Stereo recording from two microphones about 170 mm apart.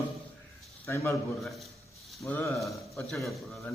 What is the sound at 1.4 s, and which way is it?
A man's voice, centre (ahead or behind).